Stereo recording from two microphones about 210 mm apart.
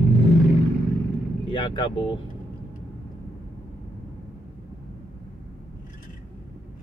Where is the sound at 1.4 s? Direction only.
20° left (ahead or behind).